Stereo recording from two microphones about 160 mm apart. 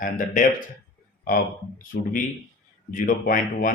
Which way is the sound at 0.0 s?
55° left (ahead or behind).